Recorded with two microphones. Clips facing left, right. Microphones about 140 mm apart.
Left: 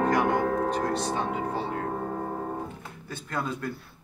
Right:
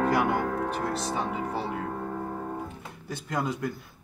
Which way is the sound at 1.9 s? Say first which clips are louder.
Left 2 dB; 30° left (ahead or behind).